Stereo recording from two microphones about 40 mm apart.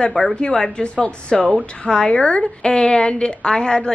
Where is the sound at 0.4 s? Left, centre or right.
Left.